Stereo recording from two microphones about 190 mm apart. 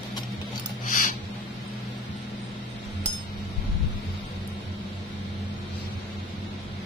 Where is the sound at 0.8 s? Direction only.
45° left (ahead or behind).